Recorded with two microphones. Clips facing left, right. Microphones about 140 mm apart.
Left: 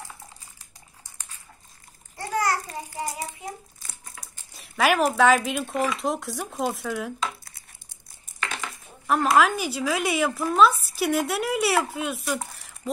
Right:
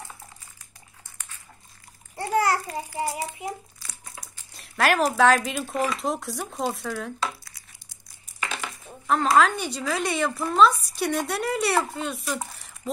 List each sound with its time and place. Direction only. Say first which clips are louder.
2.1 s babbling: right 3 dB; 30° right (ahead or behind)
3.1 s a child's voice: right 3 dB; 25° right (ahead or behind)
3.8 s crumpling: right 1 dB; 50° left (ahead or behind)
4.2 s speech: right 1 dB; centre (ahead or behind)
8.4 s dishes: even; 15° right (ahead or behind)
9.0 s a woman's voice: even; 5° left (ahead or behind)